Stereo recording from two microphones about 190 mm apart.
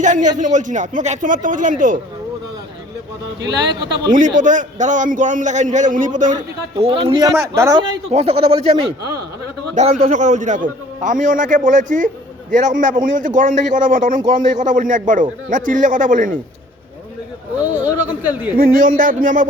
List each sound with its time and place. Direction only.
0.0 s a man's voice: 40° right (ahead or behind)
3.4 s speech: 20° right (ahead or behind)
4.4 s a man's voice: 40° right (ahead or behind); by 7.8 s 15° right (ahead or behind)
7.8 s a man's voice: 30° right (ahead or behind)
18.5 s a man's voice: 50° right (ahead or behind)